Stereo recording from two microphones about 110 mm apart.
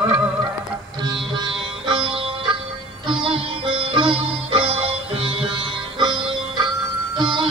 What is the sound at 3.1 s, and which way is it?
Music, 55° right (ahead or behind).